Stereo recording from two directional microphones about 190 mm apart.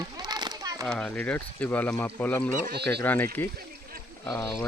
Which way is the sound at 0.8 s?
5° left (ahead or behind).